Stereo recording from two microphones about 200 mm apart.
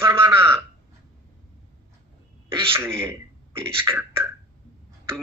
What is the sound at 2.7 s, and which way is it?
A man's voice, 10° right (ahead or behind).